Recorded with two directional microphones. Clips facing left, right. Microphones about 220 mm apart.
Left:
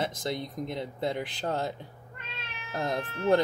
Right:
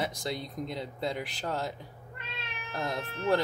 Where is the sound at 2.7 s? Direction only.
20° left (ahead or behind).